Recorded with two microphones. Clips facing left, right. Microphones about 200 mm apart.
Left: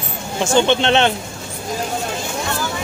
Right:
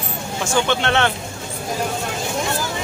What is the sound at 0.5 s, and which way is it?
Speech, 20° left (ahead or behind).